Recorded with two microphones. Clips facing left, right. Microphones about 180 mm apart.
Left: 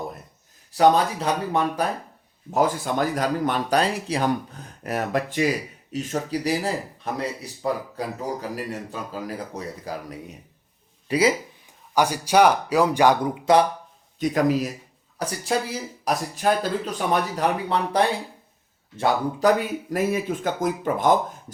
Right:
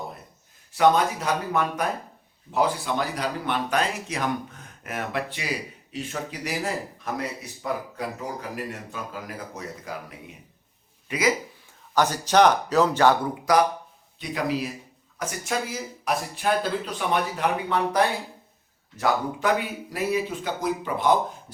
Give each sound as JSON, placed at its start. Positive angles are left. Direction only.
{"t": 0.7, "sound": "a man's voice", "side_deg": 35}
{"t": 2.5, "sound": "a man's voice", "side_deg": 45}
{"t": 11.9, "sound": "speech", "side_deg": 10}
{"t": 13.4, "sound": "speech", "side_deg": 25}
{"t": 14.2, "sound": "speech", "side_deg": 45}
{"t": 15.2, "sound": "a man's voice", "side_deg": 35}
{"t": 19.5, "sound": "speech", "side_deg": 45}